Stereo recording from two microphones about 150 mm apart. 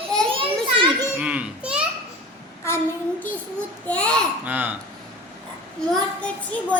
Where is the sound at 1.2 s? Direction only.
10° right (ahead or behind).